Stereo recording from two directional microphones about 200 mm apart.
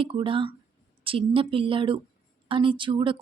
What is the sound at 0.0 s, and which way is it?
Speech, 25° right (ahead or behind).